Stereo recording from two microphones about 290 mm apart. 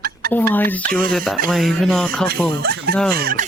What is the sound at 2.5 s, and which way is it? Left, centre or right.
Speech, right.